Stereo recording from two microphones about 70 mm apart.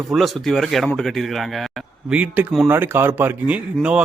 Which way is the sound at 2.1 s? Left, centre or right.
Right.